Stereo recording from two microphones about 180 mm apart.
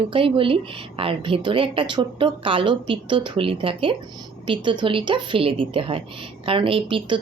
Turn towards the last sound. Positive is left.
turn(degrees=-30)  # may be behind; listen again after turning